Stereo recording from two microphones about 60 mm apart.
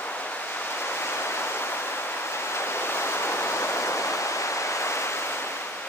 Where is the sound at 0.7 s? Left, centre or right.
Left.